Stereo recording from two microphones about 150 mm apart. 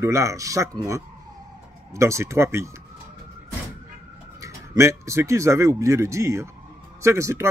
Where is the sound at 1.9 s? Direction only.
20° right (ahead or behind).